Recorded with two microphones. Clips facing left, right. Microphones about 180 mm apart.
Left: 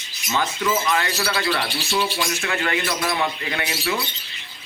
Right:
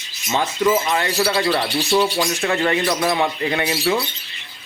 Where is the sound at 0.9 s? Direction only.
30° right (ahead or behind).